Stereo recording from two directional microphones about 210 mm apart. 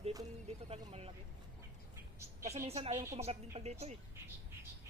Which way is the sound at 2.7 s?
30° right (ahead or behind).